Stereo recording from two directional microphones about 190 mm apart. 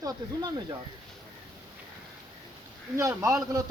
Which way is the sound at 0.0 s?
20° right (ahead or behind).